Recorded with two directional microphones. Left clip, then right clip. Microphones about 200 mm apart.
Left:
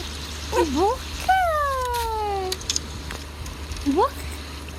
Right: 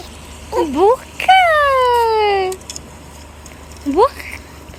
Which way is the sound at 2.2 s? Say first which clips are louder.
Right 11 dB; 25° right (ahead or behind).